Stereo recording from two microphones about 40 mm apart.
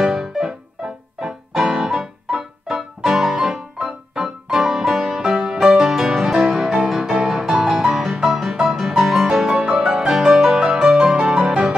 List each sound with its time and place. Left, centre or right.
0.0 s music: centre
0.4 s music: centre
3.7 s music: right
4.2 s music: centre
9.5 s music: centre